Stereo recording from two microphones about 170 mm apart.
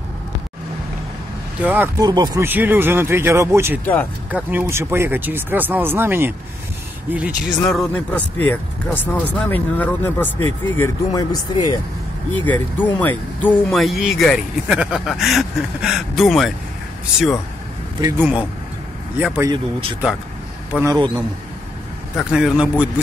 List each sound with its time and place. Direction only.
1.6 s speech: 10° right (ahead or behind)
2.0 s a man's voice: 25° right (ahead or behind)
2.4 s speech: 10° right (ahead or behind)
3.8 s speech: 10° left (ahead or behind)
4.3 s speech: 10° right (ahead or behind)
7.6 s speech: 5° left (ahead or behind)
10.8 s speech: 20° left (ahead or behind)
12.4 s speech: 10° left (ahead or behind)
18.0 s speech: 10° right (ahead or behind)
20.8 s a man's voice: 25° right (ahead or behind)
22.1 s speech: 5° right (ahead or behind)